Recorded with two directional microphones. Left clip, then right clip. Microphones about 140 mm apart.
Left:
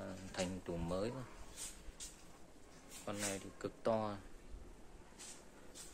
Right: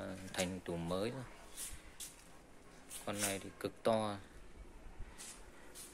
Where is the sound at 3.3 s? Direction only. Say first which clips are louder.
Right 3 dB; 25° right (ahead or behind).